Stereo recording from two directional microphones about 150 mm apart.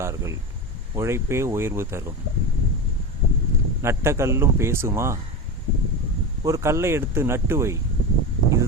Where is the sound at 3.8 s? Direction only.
20° right (ahead or behind).